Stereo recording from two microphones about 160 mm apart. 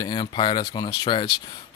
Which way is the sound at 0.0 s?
30° left (ahead or behind).